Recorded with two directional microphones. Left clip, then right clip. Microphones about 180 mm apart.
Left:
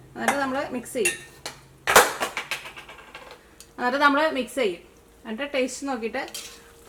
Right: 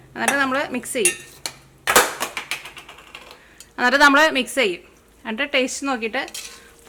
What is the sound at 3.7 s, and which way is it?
Speech, 25° right (ahead or behind).